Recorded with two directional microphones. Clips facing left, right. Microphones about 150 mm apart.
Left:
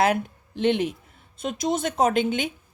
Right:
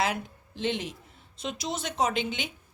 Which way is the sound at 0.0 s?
55° left (ahead or behind).